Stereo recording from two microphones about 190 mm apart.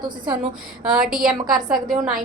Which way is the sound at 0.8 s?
5° right (ahead or behind).